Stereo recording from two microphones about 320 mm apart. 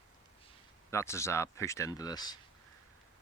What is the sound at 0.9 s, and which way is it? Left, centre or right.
Speech, centre.